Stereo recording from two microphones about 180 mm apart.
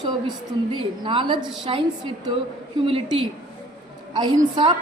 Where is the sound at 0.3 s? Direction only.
25° right (ahead or behind).